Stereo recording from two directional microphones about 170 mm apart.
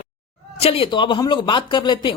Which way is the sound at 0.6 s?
35° left (ahead or behind).